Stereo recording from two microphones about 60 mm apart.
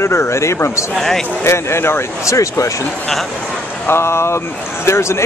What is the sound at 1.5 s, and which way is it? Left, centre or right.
Speech, left.